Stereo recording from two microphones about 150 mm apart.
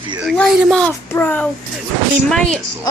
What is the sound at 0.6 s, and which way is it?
A child's voice, 5° left (ahead or behind).